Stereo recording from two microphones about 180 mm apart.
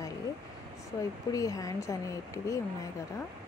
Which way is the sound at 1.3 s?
20° left (ahead or behind).